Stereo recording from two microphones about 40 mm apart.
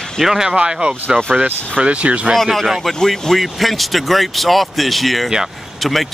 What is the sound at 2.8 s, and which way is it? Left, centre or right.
Speech, centre.